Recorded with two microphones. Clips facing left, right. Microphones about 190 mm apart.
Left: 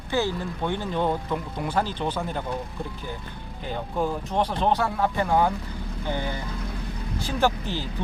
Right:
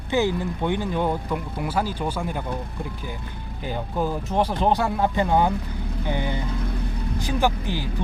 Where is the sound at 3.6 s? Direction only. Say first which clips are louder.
Right 1 dB; 5° right (ahead or behind).